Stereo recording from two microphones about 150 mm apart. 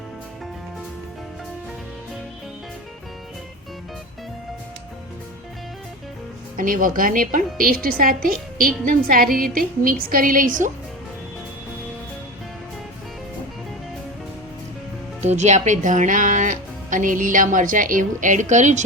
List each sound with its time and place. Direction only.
6.6 s a woman's voice: 65° right (ahead or behind)
15.2 s speech: 50° right (ahead or behind)